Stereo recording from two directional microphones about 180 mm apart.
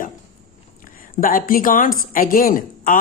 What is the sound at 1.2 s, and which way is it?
Speech, 50° left (ahead or behind).